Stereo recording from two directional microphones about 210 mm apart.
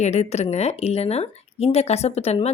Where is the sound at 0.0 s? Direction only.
30° left (ahead or behind).